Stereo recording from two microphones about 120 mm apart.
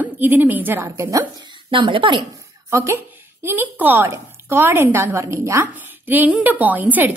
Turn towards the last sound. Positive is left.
turn(degrees=-15)  # may be behind; listen again after turning